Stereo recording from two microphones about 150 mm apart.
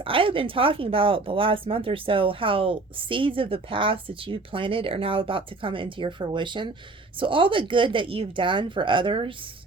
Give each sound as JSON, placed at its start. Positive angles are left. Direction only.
{"t": 0.0, "sound": "speech", "side_deg": -35}